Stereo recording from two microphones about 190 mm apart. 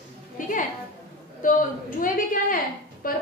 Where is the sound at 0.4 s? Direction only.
45° left (ahead or behind).